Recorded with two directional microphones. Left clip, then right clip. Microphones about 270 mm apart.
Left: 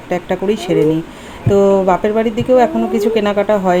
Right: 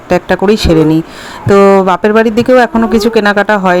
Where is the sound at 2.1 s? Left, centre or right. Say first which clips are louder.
Right 6 dB; right.